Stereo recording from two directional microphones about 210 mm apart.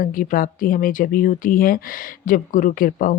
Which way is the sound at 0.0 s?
40° left (ahead or behind).